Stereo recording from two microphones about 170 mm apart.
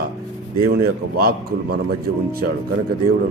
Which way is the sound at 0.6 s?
65° right (ahead or behind).